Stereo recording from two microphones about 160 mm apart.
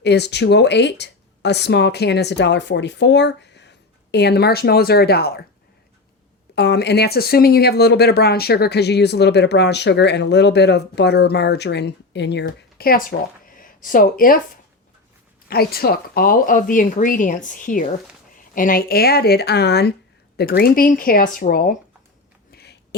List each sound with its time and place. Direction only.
0.0 s speech: 90° left
6.6 s speech: 90° left; by 14.6 s 60° left (ahead or behind)
15.4 s speech: 70° left (ahead or behind); by 19.9 s 90° left
20.3 s speech: 75° left (ahead or behind)
22.5 s a sound: 90° left